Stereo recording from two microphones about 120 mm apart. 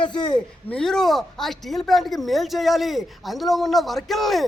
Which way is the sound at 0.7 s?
5° left (ahead or behind).